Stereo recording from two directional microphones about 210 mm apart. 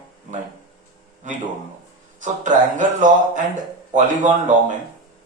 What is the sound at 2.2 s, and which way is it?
Speech, 35° right (ahead or behind).